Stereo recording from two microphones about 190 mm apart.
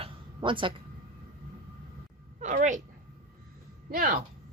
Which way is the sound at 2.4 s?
40° right (ahead or behind).